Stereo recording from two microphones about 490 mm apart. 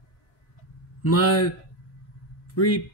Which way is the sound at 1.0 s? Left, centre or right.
Left.